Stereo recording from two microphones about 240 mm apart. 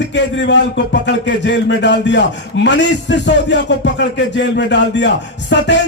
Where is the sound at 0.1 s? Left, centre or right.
Left.